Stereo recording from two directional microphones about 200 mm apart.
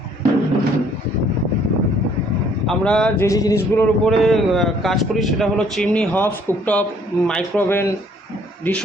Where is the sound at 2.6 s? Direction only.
5° left (ahead or behind).